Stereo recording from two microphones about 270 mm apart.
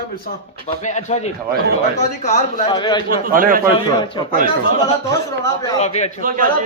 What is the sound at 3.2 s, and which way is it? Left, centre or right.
Speech, right.